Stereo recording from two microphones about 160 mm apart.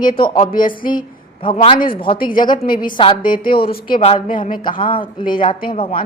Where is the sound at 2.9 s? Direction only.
30° left (ahead or behind).